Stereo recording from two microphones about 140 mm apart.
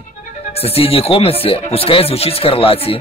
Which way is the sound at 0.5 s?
45° left (ahead or behind).